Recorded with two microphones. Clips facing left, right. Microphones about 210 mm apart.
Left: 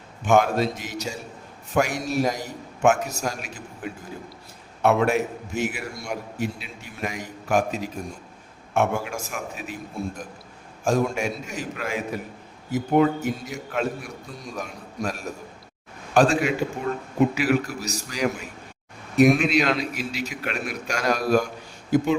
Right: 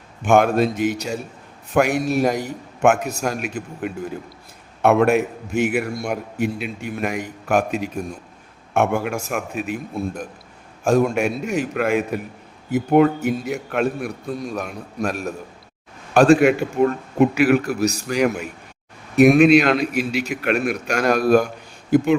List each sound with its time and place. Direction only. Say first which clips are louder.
0.3 s a man's voice: right 4 dB; 60° right (ahead or behind)
10.8 s a man's voice: right 5 dB; 60° right (ahead or behind)